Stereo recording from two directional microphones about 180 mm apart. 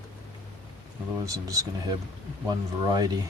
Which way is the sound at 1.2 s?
20° right (ahead or behind).